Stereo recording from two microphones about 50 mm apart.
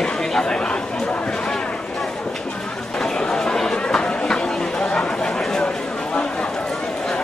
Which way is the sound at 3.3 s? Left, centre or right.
Centre.